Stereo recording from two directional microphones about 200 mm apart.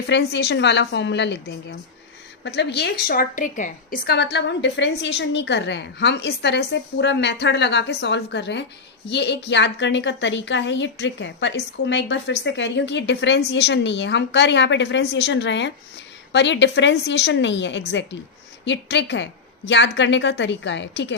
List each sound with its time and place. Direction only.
0.1 s a woman's voice: 60° left (ahead or behind)